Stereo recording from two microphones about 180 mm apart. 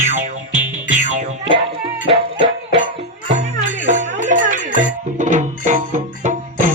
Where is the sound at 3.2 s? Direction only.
40° right (ahead or behind).